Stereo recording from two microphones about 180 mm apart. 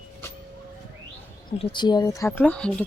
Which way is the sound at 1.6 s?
25° left (ahead or behind).